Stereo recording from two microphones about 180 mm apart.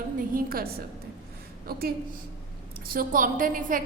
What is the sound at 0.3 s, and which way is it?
Speech, 55° right (ahead or behind).